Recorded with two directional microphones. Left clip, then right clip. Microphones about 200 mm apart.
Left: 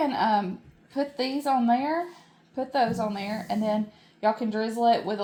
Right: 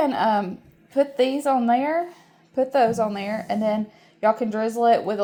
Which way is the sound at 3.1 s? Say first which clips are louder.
Right 4 dB; 45° right (ahead or behind).